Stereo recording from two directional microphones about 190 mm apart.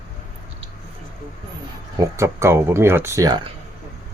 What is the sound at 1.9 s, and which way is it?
Speech, 15° right (ahead or behind).